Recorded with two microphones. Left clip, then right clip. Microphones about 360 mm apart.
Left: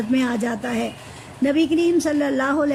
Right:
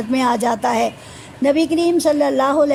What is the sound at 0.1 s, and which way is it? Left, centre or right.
Speech, centre.